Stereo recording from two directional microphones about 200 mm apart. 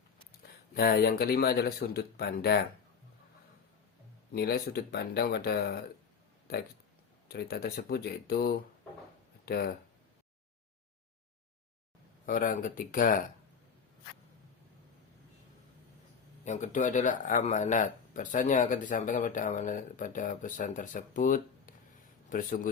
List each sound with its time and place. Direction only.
0.4 s speech: 50° left (ahead or behind)
4.4 s speech: 55° left (ahead or behind)
12.2 s speech: 45° left (ahead or behind)
16.4 s speech: 35° left (ahead or behind)